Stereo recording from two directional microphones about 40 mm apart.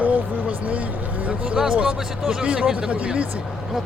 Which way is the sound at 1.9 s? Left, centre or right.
Centre.